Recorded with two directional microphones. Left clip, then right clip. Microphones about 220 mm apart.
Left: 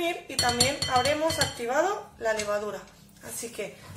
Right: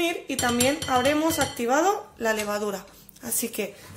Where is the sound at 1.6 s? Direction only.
50° right (ahead or behind).